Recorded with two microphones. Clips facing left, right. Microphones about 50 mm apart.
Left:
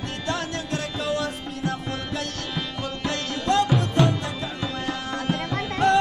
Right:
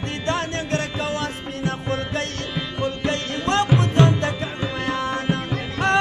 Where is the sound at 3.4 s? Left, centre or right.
Right.